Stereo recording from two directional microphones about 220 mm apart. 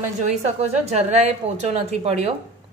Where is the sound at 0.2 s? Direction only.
30° right (ahead or behind).